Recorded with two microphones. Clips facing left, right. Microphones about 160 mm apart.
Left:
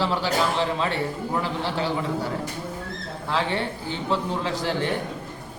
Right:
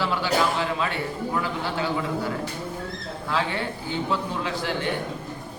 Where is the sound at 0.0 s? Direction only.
30° left (ahead or behind).